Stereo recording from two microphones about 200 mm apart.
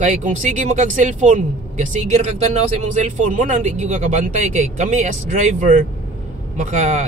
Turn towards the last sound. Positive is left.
turn(degrees=-35)  # may be behind; listen again after turning